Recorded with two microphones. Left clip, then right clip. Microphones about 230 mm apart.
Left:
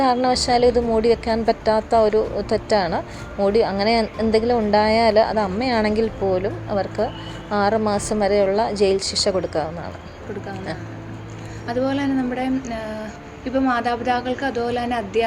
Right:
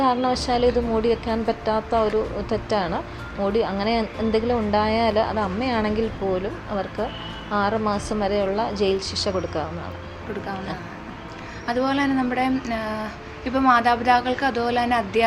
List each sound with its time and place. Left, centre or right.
0.0 s a woman's voice: centre
11.6 s a woman's voice: right